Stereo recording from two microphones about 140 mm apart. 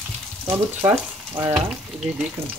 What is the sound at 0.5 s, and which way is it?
Speech, 15° right (ahead or behind).